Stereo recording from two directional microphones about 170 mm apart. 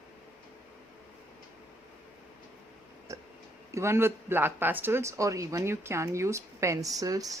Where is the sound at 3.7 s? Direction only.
15° right (ahead or behind).